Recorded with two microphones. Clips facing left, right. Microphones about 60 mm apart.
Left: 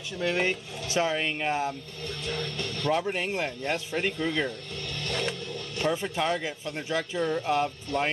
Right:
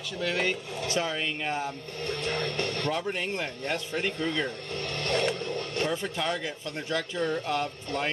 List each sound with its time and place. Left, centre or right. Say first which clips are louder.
0.2 s speech: left 2 dB; centre
2.0 s speech: right 3 dB; right
2.9 s speech: left 3 dB; centre
4.5 s speech: right 2 dB; right
5.3 s vehicle: right 4 dB; right
5.9 s speech: left 7 dB; centre